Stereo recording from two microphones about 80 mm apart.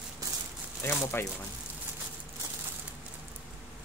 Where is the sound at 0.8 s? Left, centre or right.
Left.